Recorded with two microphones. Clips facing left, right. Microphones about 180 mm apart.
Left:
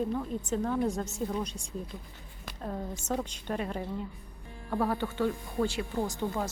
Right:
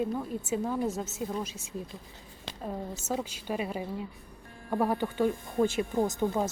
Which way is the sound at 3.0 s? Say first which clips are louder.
Even; 5° right (ahead or behind).